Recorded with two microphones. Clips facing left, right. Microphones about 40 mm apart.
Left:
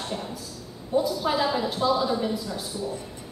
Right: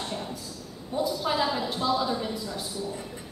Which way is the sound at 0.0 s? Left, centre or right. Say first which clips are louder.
Left 1 dB; centre.